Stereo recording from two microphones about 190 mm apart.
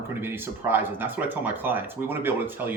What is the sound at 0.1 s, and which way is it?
Speech, 10° right (ahead or behind).